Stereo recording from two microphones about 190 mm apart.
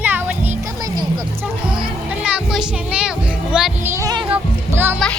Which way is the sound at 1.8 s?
5° right (ahead or behind).